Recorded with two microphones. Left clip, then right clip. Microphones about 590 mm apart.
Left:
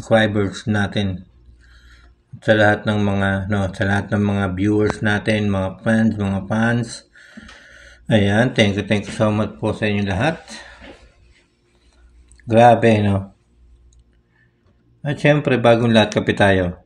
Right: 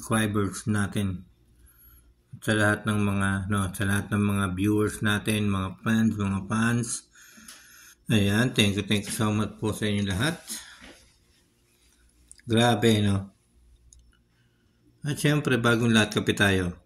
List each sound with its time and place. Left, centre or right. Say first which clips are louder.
0.0 s speech: left 11 dB; right
2.5 s speech: left 10 dB; right
12.4 s speech: left 12 dB; right
15.0 s speech: left 10 dB; right